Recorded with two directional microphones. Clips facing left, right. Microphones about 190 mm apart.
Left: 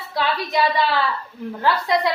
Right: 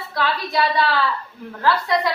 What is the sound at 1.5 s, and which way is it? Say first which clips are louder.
Speech: even; 15° left (ahead or behind).